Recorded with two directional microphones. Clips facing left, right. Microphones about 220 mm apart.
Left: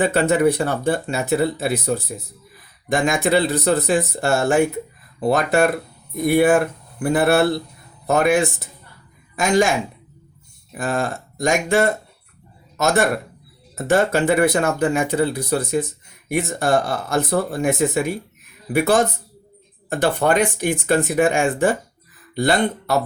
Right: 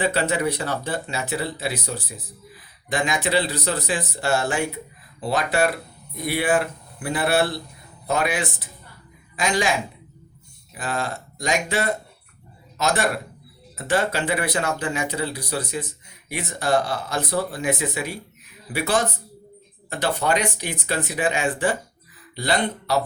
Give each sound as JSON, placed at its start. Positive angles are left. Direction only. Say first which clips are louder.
{"t": 0.0, "sound": "speech", "louder": "left 6 dB", "side_deg": 45}
{"t": 10.7, "sound": "speech", "louder": "left 5 dB", "side_deg": 50}